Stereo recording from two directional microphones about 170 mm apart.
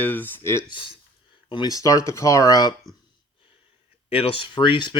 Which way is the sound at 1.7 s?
20° left (ahead or behind).